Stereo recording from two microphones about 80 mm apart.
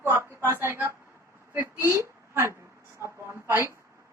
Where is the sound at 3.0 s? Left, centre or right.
Right.